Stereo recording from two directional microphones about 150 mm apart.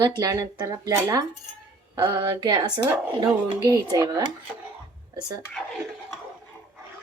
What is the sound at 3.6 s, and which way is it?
Speech, 25° right (ahead or behind).